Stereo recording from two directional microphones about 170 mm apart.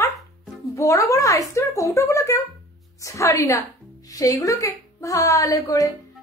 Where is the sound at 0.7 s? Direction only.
20° left (ahead or behind).